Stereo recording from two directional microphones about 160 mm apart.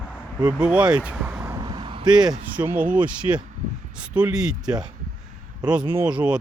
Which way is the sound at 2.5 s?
10° right (ahead or behind).